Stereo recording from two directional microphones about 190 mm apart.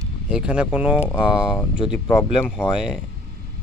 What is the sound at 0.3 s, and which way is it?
Speech, 5° right (ahead or behind).